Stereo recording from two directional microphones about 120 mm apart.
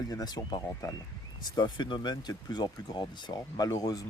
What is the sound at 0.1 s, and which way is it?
Speech, 30° left (ahead or behind).